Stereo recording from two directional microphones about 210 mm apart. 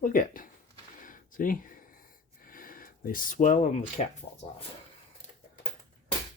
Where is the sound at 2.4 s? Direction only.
40° left (ahead or behind).